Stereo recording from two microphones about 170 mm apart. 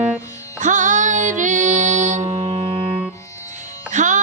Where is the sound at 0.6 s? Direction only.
45° right (ahead or behind).